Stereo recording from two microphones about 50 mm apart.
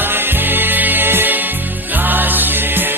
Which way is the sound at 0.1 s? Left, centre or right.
Right.